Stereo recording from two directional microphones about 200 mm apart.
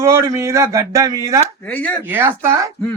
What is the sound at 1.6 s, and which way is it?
Speech, 5° left (ahead or behind).